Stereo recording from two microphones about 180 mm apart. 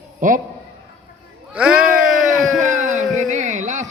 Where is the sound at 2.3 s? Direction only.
45° right (ahead or behind).